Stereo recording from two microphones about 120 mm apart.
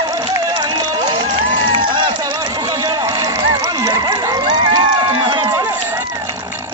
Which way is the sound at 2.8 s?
30° right (ahead or behind).